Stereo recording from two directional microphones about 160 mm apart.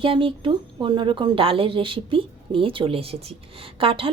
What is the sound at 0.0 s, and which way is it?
Speech, 35° right (ahead or behind).